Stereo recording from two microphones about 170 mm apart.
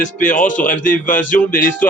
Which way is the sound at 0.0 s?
50° left (ahead or behind).